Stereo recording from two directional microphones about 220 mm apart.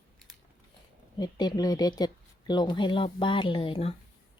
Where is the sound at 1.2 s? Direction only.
20° left (ahead or behind).